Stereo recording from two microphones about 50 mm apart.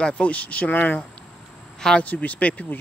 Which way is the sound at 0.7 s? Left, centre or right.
Left.